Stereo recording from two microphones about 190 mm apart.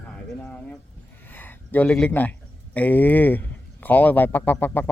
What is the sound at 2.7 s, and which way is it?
Speech, 10° left (ahead or behind).